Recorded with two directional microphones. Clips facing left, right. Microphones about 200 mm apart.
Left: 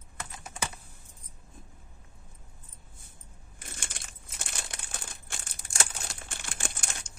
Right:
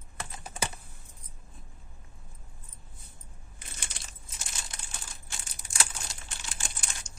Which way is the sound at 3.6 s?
50° left (ahead or behind).